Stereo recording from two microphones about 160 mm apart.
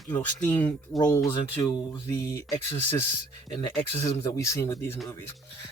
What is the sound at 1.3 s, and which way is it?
Speech, 25° left (ahead or behind).